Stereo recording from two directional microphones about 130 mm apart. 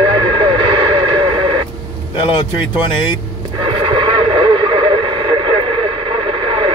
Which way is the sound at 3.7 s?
40° right (ahead or behind).